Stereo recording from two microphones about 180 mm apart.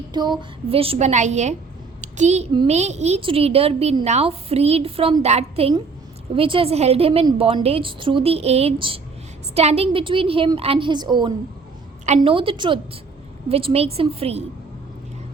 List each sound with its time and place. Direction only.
0.1 s a woman's voice: 25° right (ahead or behind); by 1.5 s 40° right (ahead or behind)
2.0 s a sound: 40° right (ahead or behind)
2.6 s a woman's voice: 40° right (ahead or behind); by 11.3 s 25° right (ahead or behind)
12.0 s a woman's voice: 35° right (ahead or behind)